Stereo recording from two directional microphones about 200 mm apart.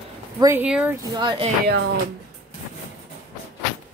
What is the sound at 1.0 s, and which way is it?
Speech, 20° right (ahead or behind).